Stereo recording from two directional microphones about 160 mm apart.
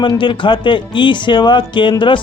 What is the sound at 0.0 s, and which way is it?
Speech, 30° left (ahead or behind).